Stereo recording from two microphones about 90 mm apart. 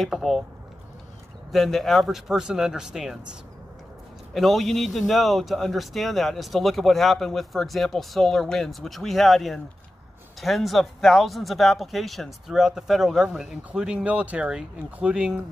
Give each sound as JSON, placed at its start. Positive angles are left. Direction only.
{"t": 0.0, "sound": "speech", "side_deg": 0}
{"t": 1.5, "sound": "speech", "side_deg": 0}
{"t": 4.3, "sound": "speech", "side_deg": 0}